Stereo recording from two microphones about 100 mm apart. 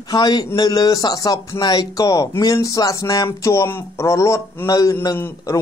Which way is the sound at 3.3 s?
25° left (ahead or behind).